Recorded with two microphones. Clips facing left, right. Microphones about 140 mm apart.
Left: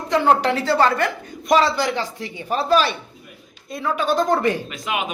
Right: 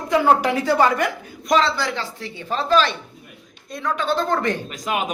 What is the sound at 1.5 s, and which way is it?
Speech, 5° left (ahead or behind).